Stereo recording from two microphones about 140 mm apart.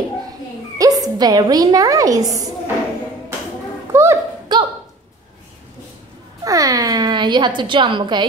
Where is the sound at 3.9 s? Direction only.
20° right (ahead or behind).